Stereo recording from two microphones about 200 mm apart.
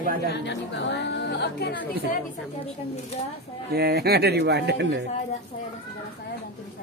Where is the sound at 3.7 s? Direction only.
50° right (ahead or behind).